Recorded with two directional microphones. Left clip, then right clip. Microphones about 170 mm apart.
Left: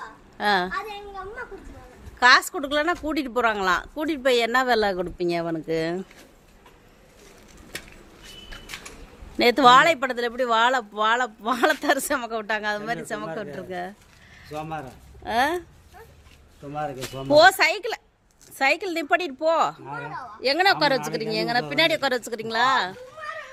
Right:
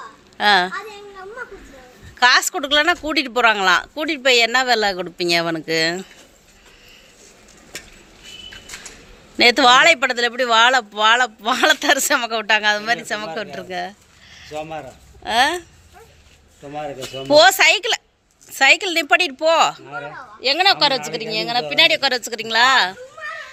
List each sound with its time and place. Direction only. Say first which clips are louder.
0.3 s speech: right 7 dB; centre (ahead or behind)
2.1 s speech: right 2 dB; centre (ahead or behind); by 5.0 s 20° left (ahead or behind)
5.0 s speech: right 7 dB; 5° left (ahead or behind)
9.4 s speech: right 3 dB; 5° left (ahead or behind)
14.5 s speech: right 4 dB; 85° left
15.2 s speech: right 6 dB; 10° left (ahead or behind)
16.7 s speech: right 3 dB; 75° left (ahead or behind)
17.2 s speech: right 4 dB; centre (ahead or behind)
20.4 s speech: right 4 dB; 20° left (ahead or behind); by 23.0 s 5° left (ahead or behind)